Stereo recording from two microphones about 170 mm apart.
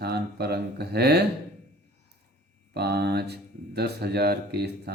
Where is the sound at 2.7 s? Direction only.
75° right (ahead or behind).